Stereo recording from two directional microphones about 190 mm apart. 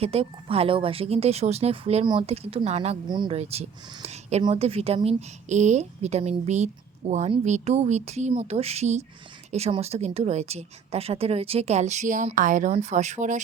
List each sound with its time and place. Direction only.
0.0 s speech: 30° right (ahead or behind)